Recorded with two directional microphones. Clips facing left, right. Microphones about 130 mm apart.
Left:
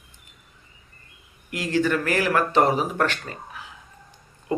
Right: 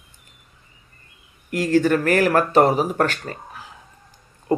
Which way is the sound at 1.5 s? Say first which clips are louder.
Right 5 dB; 45° right (ahead or behind).